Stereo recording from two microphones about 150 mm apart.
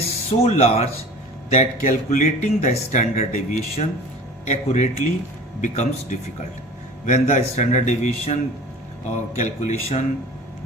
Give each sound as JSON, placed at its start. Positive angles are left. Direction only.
{"t": 0.0, "sound": "a man's voice", "side_deg": 45}